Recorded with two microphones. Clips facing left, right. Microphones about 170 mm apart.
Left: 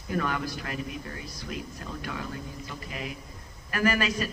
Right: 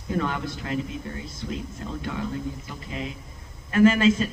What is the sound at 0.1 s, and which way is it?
A man's voice, 25° right (ahead or behind).